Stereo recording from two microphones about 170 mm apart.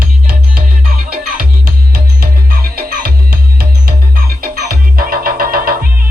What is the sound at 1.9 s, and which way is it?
Music, 60° right (ahead or behind).